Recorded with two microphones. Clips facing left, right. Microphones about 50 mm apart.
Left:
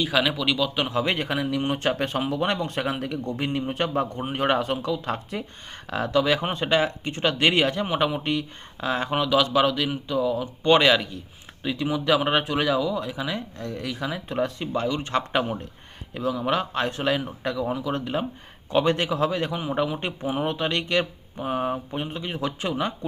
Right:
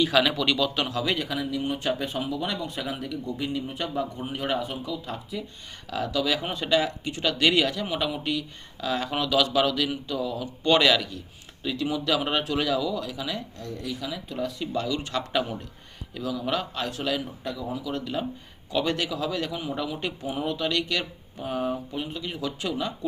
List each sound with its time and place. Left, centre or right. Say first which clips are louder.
0.0 s a man's voice: right 1 dB; centre
0.9 s a man's voice: left 3 dB; left
5.9 s speech: left 4 dB; left
14.0 s a man's voice: left 7 dB; left
17.4 s a man's voice: left 5 dB; left
17.8 s a man's voice: left 3 dB; left